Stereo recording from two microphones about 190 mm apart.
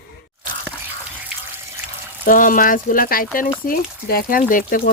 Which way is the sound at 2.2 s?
45° left (ahead or behind).